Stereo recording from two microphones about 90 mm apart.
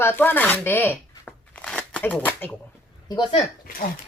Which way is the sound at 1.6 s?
10° left (ahead or behind).